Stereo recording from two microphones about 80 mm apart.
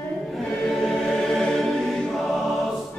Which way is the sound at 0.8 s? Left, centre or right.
Centre.